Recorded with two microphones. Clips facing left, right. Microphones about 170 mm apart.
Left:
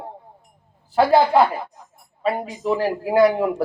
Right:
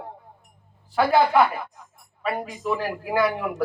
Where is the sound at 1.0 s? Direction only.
25° left (ahead or behind).